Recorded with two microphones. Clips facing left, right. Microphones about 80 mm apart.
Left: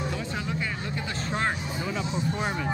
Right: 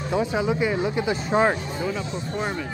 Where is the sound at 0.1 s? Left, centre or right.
Centre.